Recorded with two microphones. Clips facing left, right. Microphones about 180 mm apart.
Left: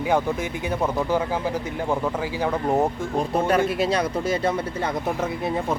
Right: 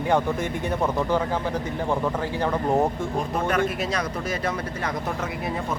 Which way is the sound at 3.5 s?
30° left (ahead or behind).